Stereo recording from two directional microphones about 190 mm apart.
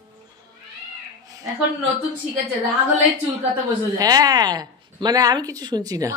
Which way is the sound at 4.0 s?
20° right (ahead or behind).